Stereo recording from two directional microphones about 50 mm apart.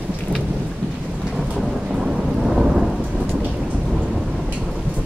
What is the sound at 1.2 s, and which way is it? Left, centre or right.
Thunder, centre.